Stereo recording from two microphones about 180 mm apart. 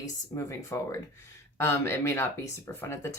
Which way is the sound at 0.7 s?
15° left (ahead or behind).